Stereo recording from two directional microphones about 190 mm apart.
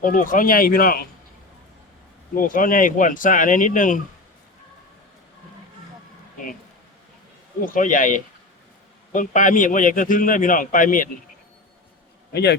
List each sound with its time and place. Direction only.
0.0 s a man's voice: 45° left (ahead or behind)
2.5 s a man's voice: 45° left (ahead or behind)
7.6 s a man's voice: 45° left (ahead or behind)
12.3 s speech: 60° left (ahead or behind)